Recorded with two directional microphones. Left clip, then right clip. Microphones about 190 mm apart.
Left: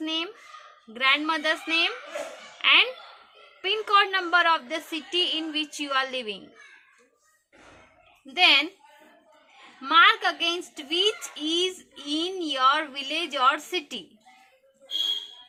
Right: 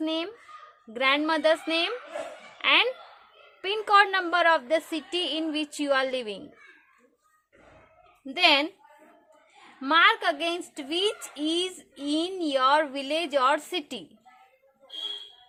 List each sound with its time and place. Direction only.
0.0 s a sound: 60° right (ahead or behind)
0.9 s a woman's voice: 60° right (ahead or behind)
8.4 s a woman's voice: 60° right (ahead or behind)
9.8 s a woman's voice: 60° right (ahead or behind)